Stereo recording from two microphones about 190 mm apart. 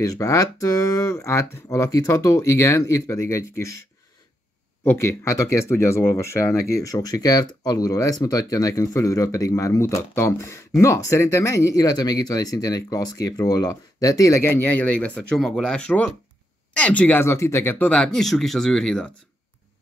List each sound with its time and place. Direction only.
0.0 s speech: 15° left (ahead or behind)
4.8 s speech: 15° left (ahead or behind)